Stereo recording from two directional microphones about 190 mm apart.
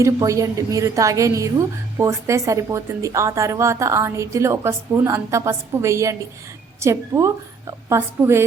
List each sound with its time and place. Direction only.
0.0 s a woman's voice: 15° right (ahead or behind)